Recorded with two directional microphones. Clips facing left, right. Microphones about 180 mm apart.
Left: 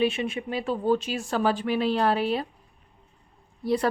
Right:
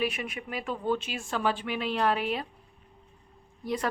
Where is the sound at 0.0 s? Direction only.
25° left (ahead or behind).